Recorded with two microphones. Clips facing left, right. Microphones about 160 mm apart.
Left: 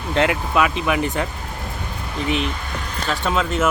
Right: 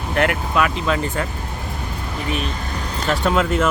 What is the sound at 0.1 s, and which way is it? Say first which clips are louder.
Speech: left 1 dB; 20° left (ahead or behind).